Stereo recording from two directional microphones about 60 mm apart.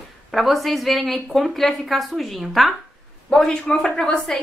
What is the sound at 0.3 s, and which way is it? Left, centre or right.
Speech, centre.